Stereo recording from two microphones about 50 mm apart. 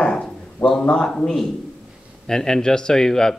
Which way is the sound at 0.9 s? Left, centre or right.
Centre.